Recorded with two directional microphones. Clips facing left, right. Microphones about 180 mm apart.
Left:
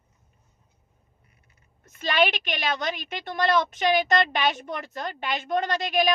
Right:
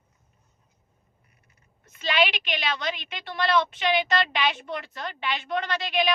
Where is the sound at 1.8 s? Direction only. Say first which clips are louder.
Left 2 dB; 45° left (ahead or behind).